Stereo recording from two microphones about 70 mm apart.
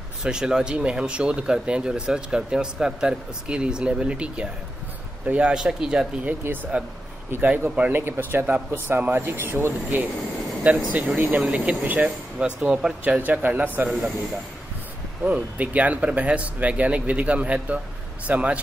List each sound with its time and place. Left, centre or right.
0.2 s speech: centre
5.5 s speech: centre
6.4 s speech: right
10.6 s speech: centre
13.2 s speech: right
15.2 s speech: right